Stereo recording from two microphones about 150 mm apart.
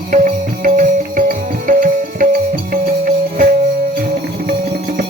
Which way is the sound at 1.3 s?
65° right (ahead or behind).